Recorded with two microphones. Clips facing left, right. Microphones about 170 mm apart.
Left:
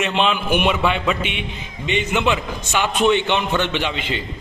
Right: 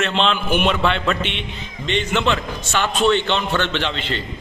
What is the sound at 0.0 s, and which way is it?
A man's voice, 10° left (ahead or behind).